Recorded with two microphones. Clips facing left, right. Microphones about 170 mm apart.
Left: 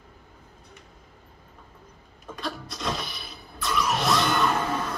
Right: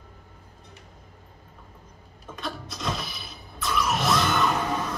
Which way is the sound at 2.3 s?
Centre (ahead or behind).